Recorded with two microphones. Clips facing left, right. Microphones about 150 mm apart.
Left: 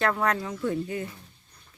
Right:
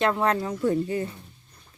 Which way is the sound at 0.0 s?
25° right (ahead or behind).